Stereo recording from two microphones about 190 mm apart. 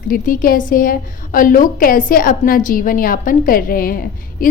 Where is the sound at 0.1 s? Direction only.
45° left (ahead or behind).